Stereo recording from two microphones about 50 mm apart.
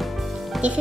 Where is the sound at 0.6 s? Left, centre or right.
Right.